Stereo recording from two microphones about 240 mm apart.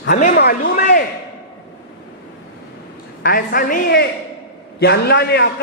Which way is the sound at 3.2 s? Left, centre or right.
Left.